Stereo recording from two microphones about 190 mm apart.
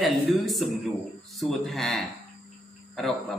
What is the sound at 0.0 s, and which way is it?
A man's voice, centre (ahead or behind).